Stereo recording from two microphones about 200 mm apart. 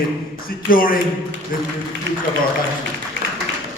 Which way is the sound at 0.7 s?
45° left (ahead or behind).